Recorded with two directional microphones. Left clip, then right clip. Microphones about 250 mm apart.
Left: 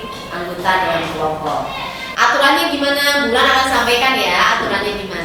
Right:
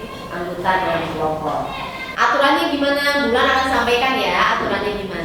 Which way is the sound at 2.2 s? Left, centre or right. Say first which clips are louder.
Left 3 dB; centre.